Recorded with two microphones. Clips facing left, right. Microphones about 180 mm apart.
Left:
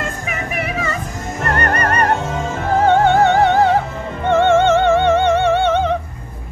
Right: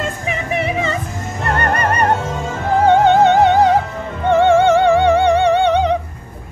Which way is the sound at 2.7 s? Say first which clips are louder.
Right 2 dB; 15° right (ahead or behind).